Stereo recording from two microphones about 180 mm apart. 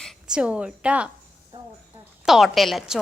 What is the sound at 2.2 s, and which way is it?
Speech, centre (ahead or behind).